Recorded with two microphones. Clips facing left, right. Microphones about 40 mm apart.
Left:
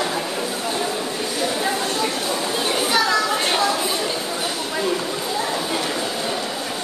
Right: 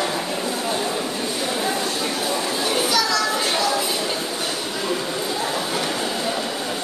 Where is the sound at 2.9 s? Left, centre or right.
Left.